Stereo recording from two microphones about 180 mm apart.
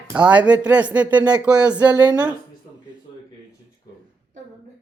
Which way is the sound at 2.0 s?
20° right (ahead or behind).